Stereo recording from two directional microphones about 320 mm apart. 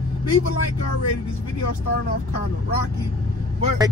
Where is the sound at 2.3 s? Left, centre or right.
Left.